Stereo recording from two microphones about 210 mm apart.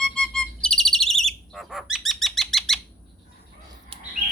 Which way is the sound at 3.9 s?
25° right (ahead or behind).